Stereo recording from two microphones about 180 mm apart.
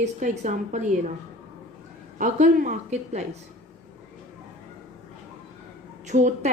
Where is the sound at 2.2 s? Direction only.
45° right (ahead or behind).